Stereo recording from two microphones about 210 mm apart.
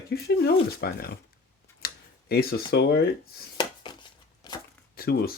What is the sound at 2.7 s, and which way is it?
Speech, 50° left (ahead or behind).